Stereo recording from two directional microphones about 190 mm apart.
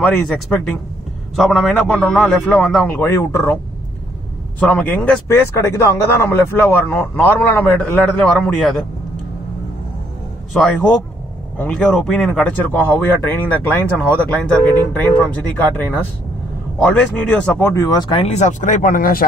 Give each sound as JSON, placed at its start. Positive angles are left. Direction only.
{"t": 0.0, "sound": "a man's voice", "side_deg": 5}
{"t": 3.0, "sound": "speech", "side_deg": 15}
{"t": 4.6, "sound": "speech", "side_deg": 10}
{"t": 10.5, "sound": "a man's voice", "side_deg": 5}